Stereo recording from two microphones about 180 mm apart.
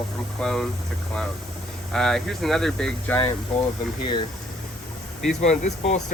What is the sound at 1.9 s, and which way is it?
Speech, 5° left (ahead or behind).